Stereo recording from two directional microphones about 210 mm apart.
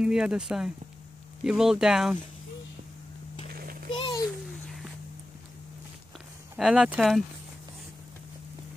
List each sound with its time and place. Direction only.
0.0 s speech: 5° right (ahead or behind)
4.0 s a sound: 20° left (ahead or behind)
6.5 s speech: 5° right (ahead or behind)